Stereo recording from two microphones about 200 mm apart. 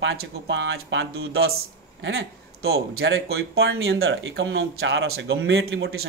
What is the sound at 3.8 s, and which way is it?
Speech, 75° right (ahead or behind).